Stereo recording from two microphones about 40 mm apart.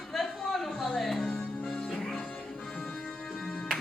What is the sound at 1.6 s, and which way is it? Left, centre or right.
Music, centre.